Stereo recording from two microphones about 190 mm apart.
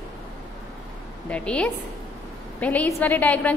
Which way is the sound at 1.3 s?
5° left (ahead or behind).